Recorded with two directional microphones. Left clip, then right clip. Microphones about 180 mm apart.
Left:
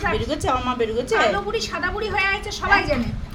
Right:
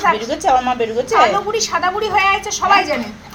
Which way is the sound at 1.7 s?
25° left (ahead or behind).